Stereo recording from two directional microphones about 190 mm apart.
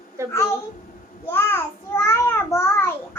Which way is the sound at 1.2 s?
10° left (ahead or behind).